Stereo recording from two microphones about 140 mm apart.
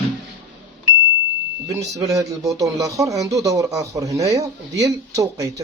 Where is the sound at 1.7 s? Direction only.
25° right (ahead or behind).